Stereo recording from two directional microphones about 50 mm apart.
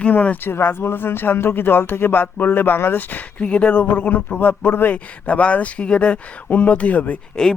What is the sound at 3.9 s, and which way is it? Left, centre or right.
Speech, left.